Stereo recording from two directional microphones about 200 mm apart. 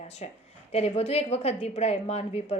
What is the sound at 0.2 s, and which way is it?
A woman's voice, 30° left (ahead or behind).